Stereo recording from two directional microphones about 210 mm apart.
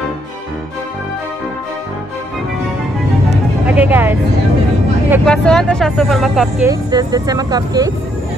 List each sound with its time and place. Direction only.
3.6 s speech: 5° right (ahead or behind)
5.2 s speech: 5° left (ahead or behind)
6.7 s speech: 20° right (ahead or behind)